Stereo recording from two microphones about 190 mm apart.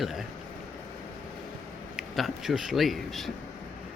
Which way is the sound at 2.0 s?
Centre (ahead or behind).